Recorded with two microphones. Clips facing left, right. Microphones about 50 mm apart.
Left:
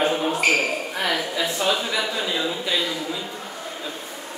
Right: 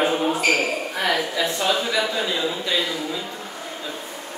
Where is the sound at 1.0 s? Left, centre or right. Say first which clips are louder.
Right 2 dB; centre.